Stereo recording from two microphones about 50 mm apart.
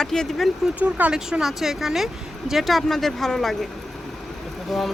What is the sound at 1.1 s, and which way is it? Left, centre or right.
Speech, centre.